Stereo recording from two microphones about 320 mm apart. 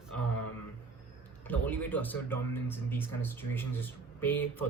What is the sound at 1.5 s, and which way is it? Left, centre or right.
Speech, centre.